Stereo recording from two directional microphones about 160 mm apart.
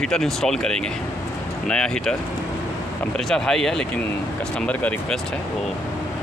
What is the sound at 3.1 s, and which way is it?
Speech, 5° left (ahead or behind).